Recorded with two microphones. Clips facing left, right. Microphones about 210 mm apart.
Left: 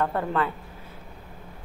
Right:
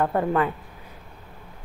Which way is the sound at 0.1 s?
15° right (ahead or behind).